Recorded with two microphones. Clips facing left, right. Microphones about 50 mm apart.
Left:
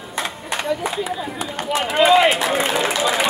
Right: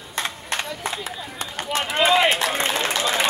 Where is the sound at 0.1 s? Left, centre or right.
Centre.